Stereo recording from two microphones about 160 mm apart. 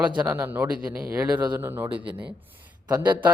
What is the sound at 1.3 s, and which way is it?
Speech, 25° right (ahead or behind).